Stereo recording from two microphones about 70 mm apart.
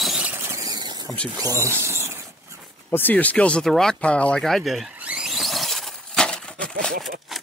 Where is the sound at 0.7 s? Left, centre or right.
Right.